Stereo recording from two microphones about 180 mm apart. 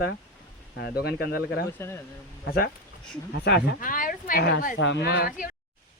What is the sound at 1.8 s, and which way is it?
Speech, 15° left (ahead or behind).